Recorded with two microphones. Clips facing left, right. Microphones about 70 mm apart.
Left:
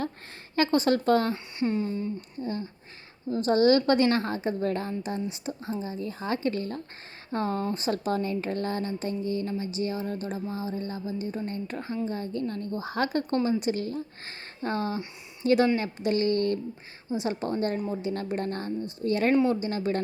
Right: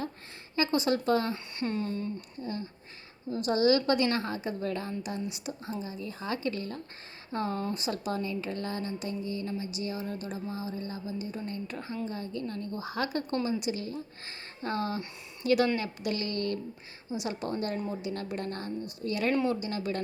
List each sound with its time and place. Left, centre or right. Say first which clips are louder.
0.5 s speech: left 4 dB; left
1.3 s speech: left 5 dB; centre
2.4 s a woman's voice: left 5 dB; left
19.3 s speech: left 5 dB; left
19.5 s a woman's voice: left 5 dB; left